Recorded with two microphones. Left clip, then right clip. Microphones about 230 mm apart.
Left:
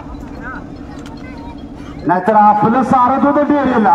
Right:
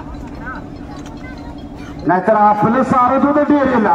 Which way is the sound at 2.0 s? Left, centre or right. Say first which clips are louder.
Left 2 dB; left.